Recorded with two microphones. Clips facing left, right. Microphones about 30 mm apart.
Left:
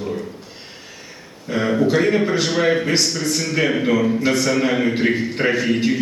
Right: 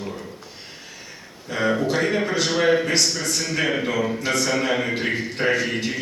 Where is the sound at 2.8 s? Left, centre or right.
Centre.